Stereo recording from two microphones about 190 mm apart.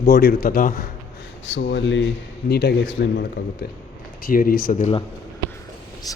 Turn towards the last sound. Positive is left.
turn(degrees=20)  # may be behind; listen again after turning